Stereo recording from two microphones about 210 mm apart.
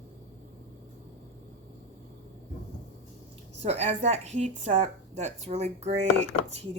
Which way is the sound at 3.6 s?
30° right (ahead or behind).